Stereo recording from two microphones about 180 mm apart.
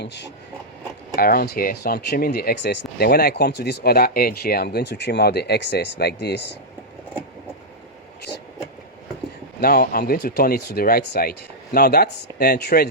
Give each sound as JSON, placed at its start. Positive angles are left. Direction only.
{"t": 0.0, "sound": "speech", "side_deg": 70}
{"t": 1.1, "sound": "speech", "side_deg": 55}
{"t": 9.6, "sound": "speech", "side_deg": 55}